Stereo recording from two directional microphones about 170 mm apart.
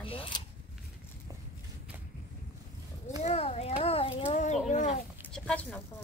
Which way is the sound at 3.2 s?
40° left (ahead or behind).